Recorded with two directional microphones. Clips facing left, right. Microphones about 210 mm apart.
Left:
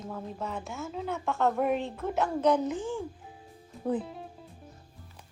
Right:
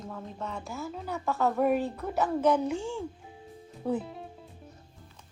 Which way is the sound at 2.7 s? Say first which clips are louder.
Even; 15° left (ahead or behind).